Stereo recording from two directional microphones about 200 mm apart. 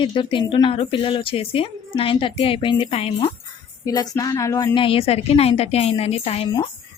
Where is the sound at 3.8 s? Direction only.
20° left (ahead or behind).